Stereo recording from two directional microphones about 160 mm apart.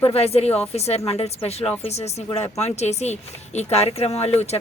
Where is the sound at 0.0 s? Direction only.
40° left (ahead or behind).